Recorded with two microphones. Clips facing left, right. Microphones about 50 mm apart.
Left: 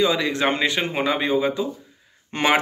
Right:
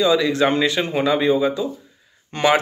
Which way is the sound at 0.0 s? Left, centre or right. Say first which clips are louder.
Right 3 dB; left.